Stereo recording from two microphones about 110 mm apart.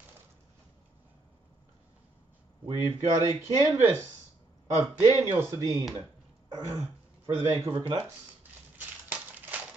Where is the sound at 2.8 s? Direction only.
30° right (ahead or behind).